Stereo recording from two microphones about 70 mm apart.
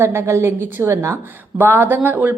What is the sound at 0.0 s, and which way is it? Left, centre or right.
A woman's voice, right.